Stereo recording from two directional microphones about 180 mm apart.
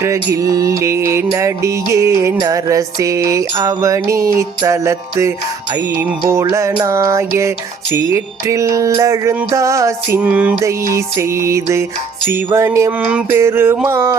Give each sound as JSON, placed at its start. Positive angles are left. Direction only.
{"t": 0.3, "sound": "music", "side_deg": -20}